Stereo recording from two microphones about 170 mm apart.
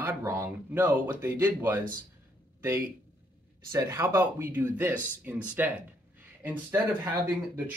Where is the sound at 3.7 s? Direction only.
20° right (ahead or behind).